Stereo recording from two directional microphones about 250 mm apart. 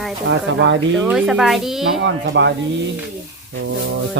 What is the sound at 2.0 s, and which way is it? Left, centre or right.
Speech, right.